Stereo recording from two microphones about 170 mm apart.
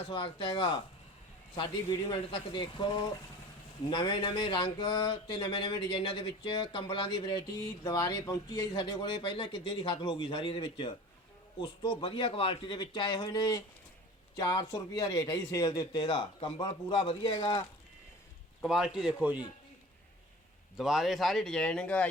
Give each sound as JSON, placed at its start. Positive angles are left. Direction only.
{"t": 0.1, "sound": "speech", "side_deg": 30}
{"t": 18.6, "sound": "speech", "side_deg": 0}
{"t": 20.7, "sound": "speech", "side_deg": 0}